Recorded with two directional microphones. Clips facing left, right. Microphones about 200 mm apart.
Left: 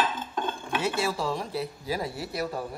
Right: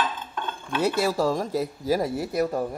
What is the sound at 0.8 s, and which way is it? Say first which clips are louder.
Speech: right 6 dB; 40° right (ahead or behind).